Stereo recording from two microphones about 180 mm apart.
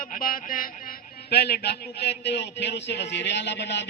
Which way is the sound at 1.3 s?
65° left (ahead or behind).